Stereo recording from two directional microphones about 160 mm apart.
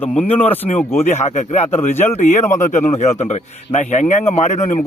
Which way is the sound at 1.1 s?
45° left (ahead or behind).